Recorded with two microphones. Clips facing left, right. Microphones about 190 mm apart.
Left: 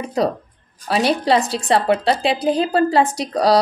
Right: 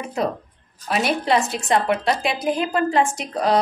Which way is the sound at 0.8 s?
35° left (ahead or behind).